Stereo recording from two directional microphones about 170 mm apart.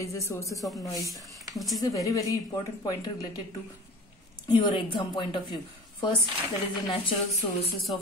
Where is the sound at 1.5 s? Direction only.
Centre (ahead or behind).